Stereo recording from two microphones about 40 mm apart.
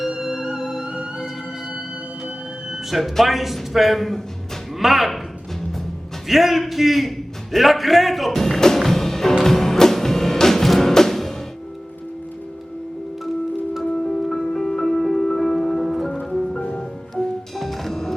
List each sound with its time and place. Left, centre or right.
0.1 s music: centre
2.9 s speech: centre
6.2 s speech: centre
8.3 s music: centre
13.9 s music: centre
16.6 s music: left
17.2 s music: centre